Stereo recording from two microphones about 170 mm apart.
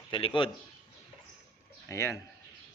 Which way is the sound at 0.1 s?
30° left (ahead or behind).